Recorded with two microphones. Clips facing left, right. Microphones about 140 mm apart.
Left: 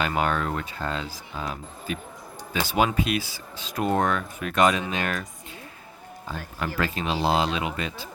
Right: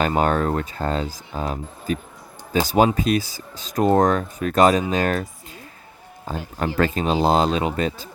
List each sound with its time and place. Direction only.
0.0 s speech: 40° right (ahead or behind)
6.3 s speech: 45° right (ahead or behind)